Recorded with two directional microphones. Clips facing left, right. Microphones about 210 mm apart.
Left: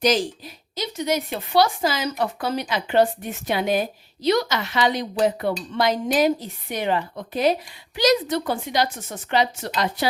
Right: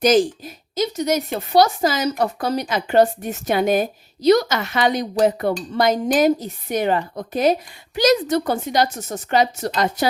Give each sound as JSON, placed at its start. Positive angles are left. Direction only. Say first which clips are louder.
{"t": 0.0, "sound": "a woman's voice", "louder": "right 5 dB", "side_deg": -50}